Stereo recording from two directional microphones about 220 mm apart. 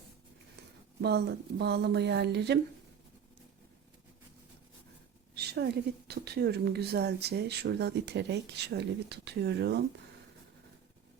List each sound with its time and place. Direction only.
1.0 s a woman's voice: 50° right (ahead or behind)
5.3 s a woman's voice: 45° right (ahead or behind)